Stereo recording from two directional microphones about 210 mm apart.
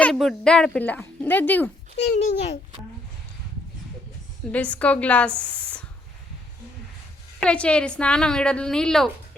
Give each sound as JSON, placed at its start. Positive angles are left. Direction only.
{"t": 0.0, "sound": "speech", "side_deg": 0}
{"t": 2.0, "sound": "a child's voice", "side_deg": 30}
{"t": 4.5, "sound": "speech", "side_deg": 5}
{"t": 7.3, "sound": "a woman's voice", "side_deg": 5}